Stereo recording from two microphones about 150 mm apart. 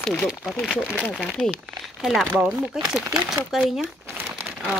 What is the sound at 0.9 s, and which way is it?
A woman's voice, 10° left (ahead or behind).